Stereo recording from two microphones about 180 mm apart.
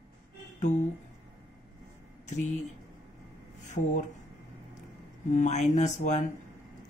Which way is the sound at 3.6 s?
40° left (ahead or behind).